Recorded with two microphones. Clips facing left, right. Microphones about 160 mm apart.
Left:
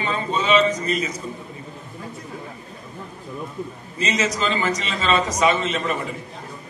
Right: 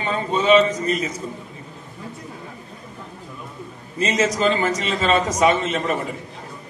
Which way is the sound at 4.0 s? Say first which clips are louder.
Right 4 dB; 55° right (ahead or behind).